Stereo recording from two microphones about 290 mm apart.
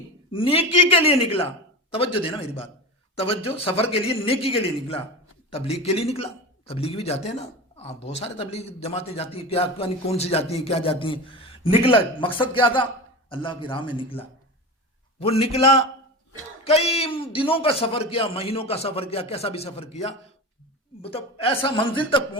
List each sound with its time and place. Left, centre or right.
0.3 s a man's voice: centre
3.2 s a man's voice: centre
15.3 s a man's voice: centre